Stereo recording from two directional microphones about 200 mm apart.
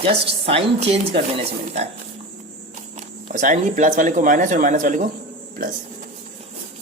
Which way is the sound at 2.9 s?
40° right (ahead or behind).